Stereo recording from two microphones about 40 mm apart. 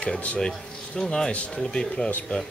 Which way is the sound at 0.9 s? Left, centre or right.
Centre.